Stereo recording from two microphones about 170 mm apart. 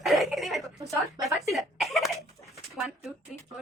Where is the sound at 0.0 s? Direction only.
Centre (ahead or behind).